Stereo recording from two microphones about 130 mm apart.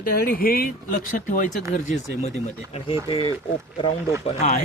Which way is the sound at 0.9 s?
90° left.